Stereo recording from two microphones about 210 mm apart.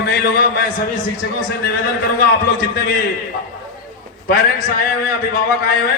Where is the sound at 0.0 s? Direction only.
50° left (ahead or behind).